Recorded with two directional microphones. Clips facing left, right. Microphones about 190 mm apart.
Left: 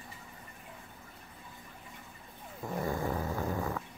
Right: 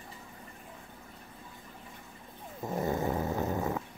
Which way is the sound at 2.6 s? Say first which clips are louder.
Right 3 dB; 20° right (ahead or behind).